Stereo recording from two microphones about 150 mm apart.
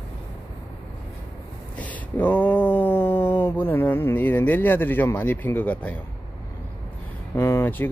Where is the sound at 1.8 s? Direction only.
10° left (ahead or behind).